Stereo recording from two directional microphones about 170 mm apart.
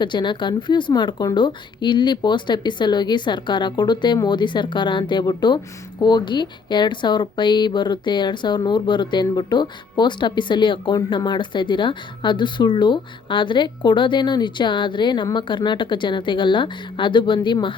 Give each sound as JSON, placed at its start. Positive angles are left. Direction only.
{"t": 0.0, "sound": "speech", "side_deg": 25}